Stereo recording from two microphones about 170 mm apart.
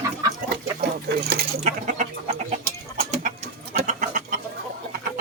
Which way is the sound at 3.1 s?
40° right (ahead or behind).